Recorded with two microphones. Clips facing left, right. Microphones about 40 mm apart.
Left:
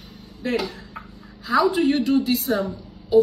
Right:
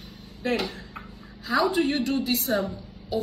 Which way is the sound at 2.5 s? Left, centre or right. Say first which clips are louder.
Left 3 dB; left.